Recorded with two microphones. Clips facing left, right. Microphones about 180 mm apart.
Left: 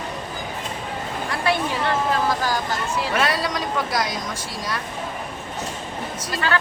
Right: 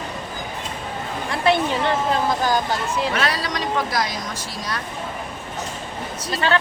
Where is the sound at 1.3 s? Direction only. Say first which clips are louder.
Right 4 dB; 20° right (ahead or behind).